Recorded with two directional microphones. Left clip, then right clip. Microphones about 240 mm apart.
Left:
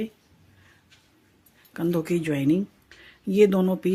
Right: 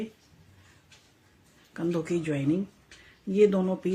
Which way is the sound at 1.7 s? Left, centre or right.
Left.